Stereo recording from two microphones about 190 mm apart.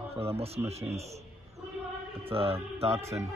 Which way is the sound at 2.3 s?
30° right (ahead or behind).